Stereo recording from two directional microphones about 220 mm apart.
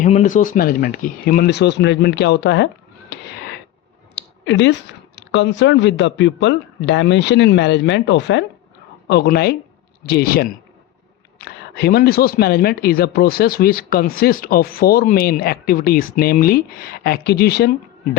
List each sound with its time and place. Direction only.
0.0 s a man's voice: 35° left (ahead or behind); by 2.6 s 50° left (ahead or behind)
3.1 s cat: 50° left (ahead or behind)
4.1 s a man's voice: 55° left (ahead or behind)